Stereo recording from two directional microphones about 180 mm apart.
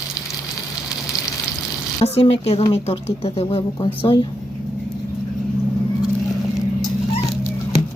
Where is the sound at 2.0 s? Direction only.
35° left (ahead or behind).